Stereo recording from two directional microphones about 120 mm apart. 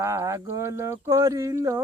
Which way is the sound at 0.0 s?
25° right (ahead or behind).